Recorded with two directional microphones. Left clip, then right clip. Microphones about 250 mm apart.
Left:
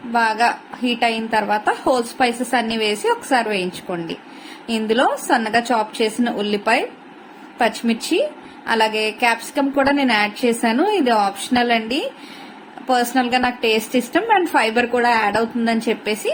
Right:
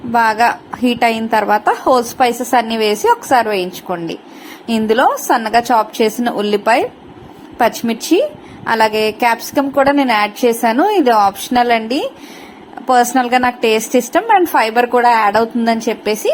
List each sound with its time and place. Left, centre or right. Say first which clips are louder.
0.1 s a woman's voice: right 5 dB; right